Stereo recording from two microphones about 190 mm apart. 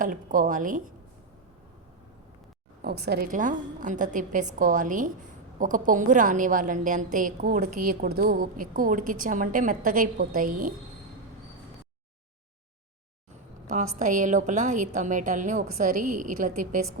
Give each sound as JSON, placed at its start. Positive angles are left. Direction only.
{"t": 0.0, "sound": "a woman's voice", "side_deg": -45}
{"t": 2.8, "sound": "a woman's voice", "side_deg": -60}
{"t": 3.3, "sound": "a woman's voice", "side_deg": -40}
{"t": 14.0, "sound": "a woman's voice", "side_deg": -40}